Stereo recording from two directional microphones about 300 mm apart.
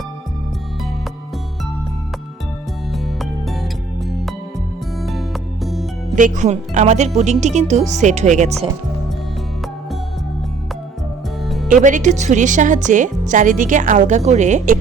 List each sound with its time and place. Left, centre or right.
2.9 s music: centre
6.1 s a woman's voice: right
11.4 s music: centre
11.7 s a woman's voice: right